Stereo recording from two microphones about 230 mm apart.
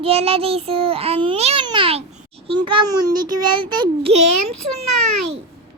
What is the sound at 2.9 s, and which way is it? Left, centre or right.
Child singing, right.